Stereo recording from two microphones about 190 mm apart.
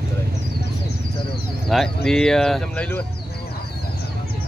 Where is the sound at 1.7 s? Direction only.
Centre (ahead or behind).